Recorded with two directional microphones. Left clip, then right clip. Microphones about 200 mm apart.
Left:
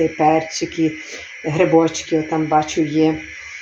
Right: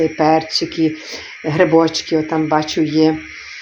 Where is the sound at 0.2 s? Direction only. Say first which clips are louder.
Right 2 dB; 30° right (ahead or behind).